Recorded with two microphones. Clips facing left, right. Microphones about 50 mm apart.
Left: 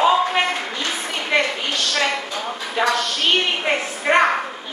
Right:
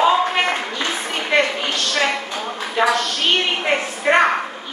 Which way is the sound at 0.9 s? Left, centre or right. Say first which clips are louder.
Right 1 dB; centre.